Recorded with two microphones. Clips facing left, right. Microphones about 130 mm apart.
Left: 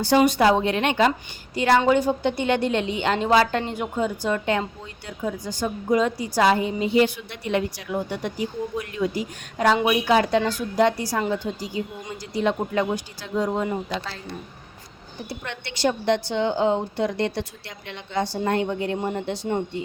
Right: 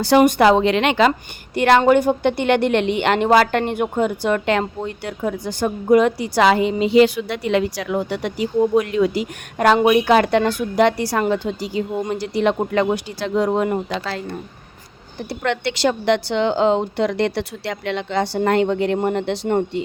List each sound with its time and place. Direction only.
0.0 s a woman's voice: 65° right (ahead or behind); by 1.1 s 90° right
1.5 s a woman's voice: 70° right (ahead or behind)
15.3 s a woman's voice: 90° right